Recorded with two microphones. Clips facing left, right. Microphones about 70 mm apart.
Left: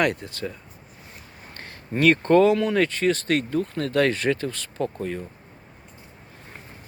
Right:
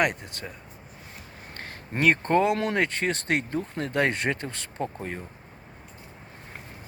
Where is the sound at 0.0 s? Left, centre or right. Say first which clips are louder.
Left 2 dB; centre.